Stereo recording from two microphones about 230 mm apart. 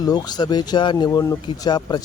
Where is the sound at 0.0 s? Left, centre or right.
Centre.